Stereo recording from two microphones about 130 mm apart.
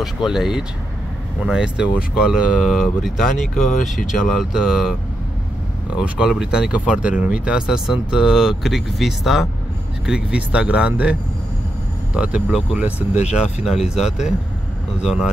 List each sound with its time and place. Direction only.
0.0 s speech: centre (ahead or behind)
5.9 s speech: 5° right (ahead or behind)
13.1 s speech: 60° left (ahead or behind)
13.7 s speech: 5° right (ahead or behind)